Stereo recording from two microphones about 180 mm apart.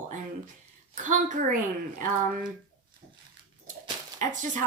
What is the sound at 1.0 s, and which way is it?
A woman's voice, 45° right (ahead or behind).